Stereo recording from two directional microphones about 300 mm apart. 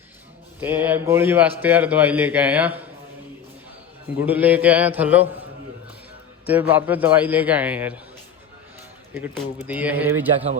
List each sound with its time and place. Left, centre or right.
0.6 s a man's voice: centre
4.2 s a man's voice: centre
6.5 s a man's voice: centre
9.1 s a man's voice: centre